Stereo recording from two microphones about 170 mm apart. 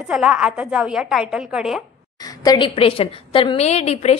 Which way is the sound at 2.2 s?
25° left (ahead or behind).